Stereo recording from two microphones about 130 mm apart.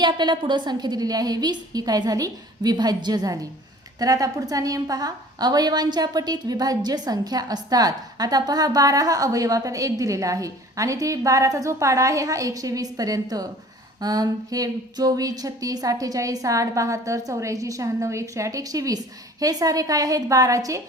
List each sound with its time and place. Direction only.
0.0 s a woman's voice: 35° right (ahead or behind)